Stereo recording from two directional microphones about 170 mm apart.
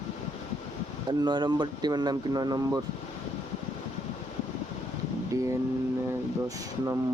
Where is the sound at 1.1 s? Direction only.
25° right (ahead or behind).